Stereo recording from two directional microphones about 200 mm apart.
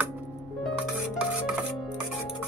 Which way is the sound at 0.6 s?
Centre (ahead or behind).